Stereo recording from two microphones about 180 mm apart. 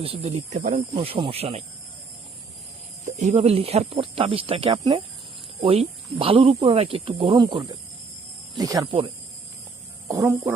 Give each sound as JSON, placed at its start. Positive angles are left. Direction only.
{"t": 0.0, "sound": "speech", "side_deg": -35}
{"t": 0.9, "sound": "speech", "side_deg": -30}
{"t": 3.1, "sound": "speech", "side_deg": -40}
{"t": 10.1, "sound": "speech", "side_deg": -15}